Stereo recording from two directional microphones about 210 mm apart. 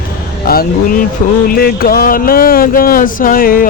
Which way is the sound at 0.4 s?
45° left (ahead or behind).